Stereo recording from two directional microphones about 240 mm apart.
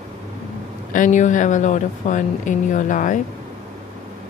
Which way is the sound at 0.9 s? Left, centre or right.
Left.